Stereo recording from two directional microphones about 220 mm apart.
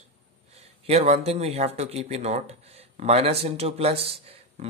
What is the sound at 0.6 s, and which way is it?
Speech, 30° right (ahead or behind).